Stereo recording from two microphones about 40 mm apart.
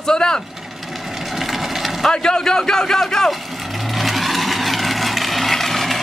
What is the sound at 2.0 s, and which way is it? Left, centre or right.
A man's voice, centre.